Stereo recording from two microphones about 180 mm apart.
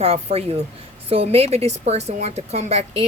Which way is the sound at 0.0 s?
35° right (ahead or behind).